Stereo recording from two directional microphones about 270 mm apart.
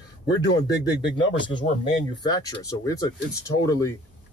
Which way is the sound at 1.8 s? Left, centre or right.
Centre.